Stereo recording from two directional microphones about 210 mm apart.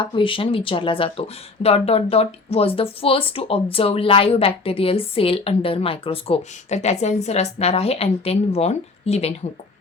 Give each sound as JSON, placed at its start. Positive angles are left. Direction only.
{"t": 0.0, "sound": "speech", "side_deg": 25}